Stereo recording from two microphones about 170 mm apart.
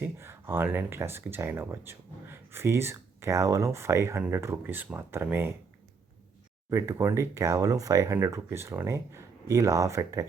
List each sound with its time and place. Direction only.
0.0 s speech: 15° right (ahead or behind)
6.7 s speech: 15° right (ahead or behind)